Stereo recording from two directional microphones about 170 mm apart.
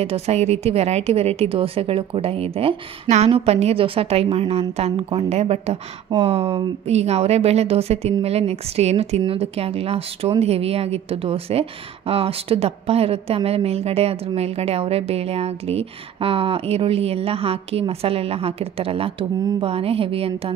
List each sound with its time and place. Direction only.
0.0 s a woman's voice: 35° right (ahead or behind)